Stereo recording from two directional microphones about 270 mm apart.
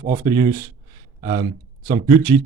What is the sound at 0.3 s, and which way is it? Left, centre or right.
Speech, centre.